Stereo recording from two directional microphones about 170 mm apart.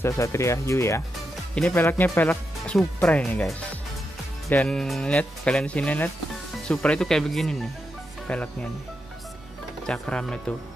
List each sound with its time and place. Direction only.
0.0 s speech: 15° left (ahead or behind)
9.8 s speech: 5° left (ahead or behind)